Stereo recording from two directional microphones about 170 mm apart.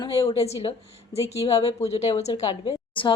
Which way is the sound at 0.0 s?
30° left (ahead or behind).